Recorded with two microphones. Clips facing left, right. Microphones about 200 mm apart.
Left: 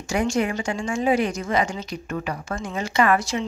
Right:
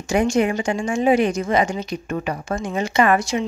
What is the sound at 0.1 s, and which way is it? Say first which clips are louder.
Speech: right 4 dB; 20° right (ahead or behind).